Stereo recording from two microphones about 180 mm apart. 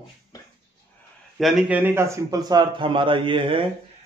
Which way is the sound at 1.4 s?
5° right (ahead or behind).